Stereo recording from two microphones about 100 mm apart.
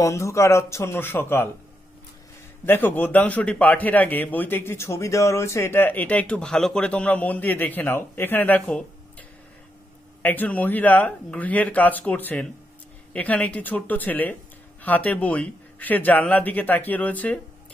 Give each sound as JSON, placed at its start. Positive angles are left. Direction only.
{"t": 0.0, "sound": "speech", "side_deg": 30}
{"t": 2.6, "sound": "a man's voice", "side_deg": 20}
{"t": 10.2, "sound": "a man's voice", "side_deg": 15}